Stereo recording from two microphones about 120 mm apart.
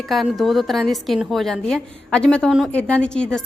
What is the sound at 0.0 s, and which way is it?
A woman's voice, centre (ahead or behind).